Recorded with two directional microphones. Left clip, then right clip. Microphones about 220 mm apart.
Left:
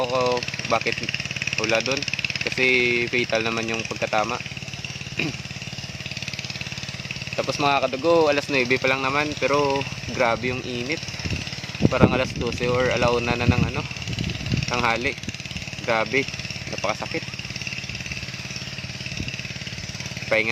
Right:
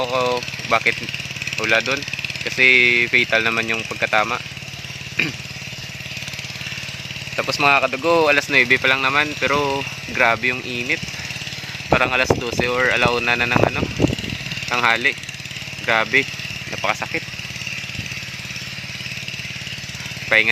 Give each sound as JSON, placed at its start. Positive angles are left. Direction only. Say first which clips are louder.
{"t": 0.0, "sound": "speech", "louder": "right 2 dB", "side_deg": 0}
{"t": 2.0, "sound": "vehicle", "louder": "even", "side_deg": -40}
{"t": 2.6, "sound": "speech", "louder": "right 7 dB", "side_deg": 0}
{"t": 7.3, "sound": "speech", "louder": "right 5 dB", "side_deg": -10}
{"t": 20.3, "sound": "speech", "louder": "right 6 dB", "side_deg": 0}